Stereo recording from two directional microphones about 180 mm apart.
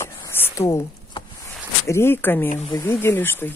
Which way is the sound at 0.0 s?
15° left (ahead or behind).